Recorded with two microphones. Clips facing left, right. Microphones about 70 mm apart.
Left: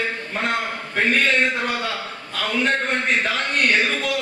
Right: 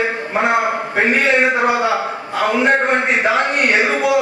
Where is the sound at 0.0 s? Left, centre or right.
Right.